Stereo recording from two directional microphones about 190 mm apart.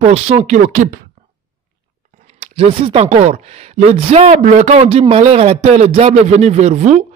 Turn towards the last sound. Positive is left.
turn(degrees=-35)  # may be behind; listen again after turning